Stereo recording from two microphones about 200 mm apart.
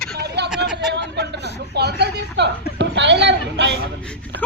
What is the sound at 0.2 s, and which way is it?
Vehicle, 55° right (ahead or behind).